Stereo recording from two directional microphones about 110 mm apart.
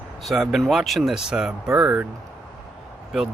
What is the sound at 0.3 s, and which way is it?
Speech, centre (ahead or behind).